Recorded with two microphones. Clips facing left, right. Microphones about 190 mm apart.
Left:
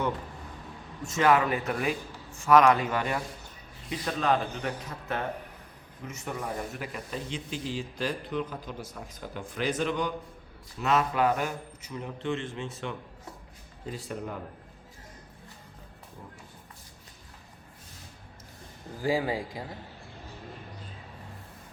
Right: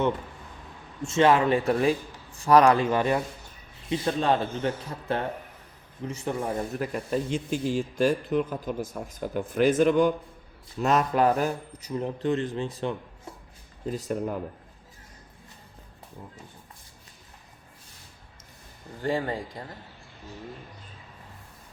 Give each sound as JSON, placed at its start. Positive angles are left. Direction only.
{"t": 1.0, "sound": "a man's voice", "side_deg": -25}
{"t": 6.7, "sound": "a man's voice", "side_deg": -45}
{"t": 18.9, "sound": "speech", "side_deg": 5}